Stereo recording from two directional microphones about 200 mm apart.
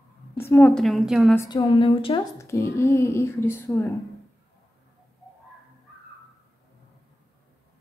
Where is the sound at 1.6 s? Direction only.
30° left (ahead or behind).